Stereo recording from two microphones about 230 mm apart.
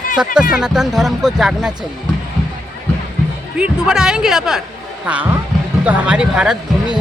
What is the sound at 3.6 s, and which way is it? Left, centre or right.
Speech, centre.